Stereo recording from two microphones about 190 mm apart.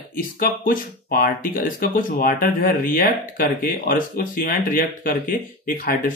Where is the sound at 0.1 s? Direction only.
50° left (ahead or behind).